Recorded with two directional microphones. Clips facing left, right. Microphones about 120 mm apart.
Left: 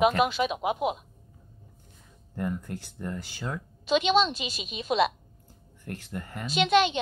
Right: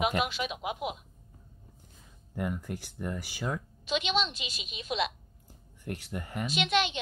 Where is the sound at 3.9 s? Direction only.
40° left (ahead or behind).